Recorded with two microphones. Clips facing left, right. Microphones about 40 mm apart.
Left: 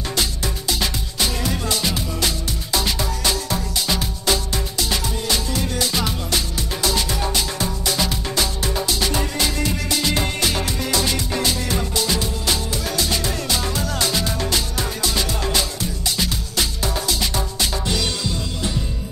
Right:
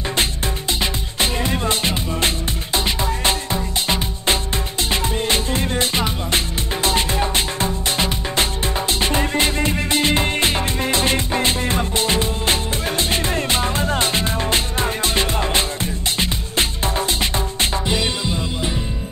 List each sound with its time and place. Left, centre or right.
0.1 s music: right
17.8 s music: right